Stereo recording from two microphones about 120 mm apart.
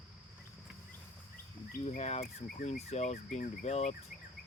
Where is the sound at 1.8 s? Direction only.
65° left (ahead or behind).